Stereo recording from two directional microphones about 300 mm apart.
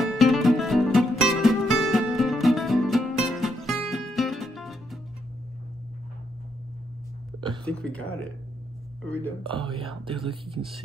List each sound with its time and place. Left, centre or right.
0.0 s music: centre
7.6 s speech: centre
9.4 s speech: centre